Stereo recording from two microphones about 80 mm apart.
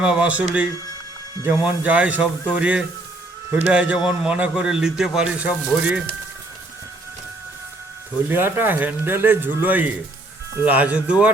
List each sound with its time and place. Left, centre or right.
0.0 s a man's voice: centre
5.4 s a man's voice: centre
8.3 s a man's voice: right